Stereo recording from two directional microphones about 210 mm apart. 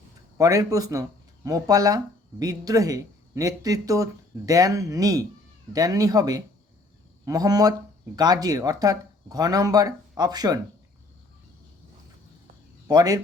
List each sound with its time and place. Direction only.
0.3 s speech: 15° right (ahead or behind)
12.9 s speech: 20° right (ahead or behind)